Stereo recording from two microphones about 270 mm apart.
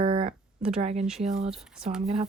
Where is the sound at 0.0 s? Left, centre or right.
Centre.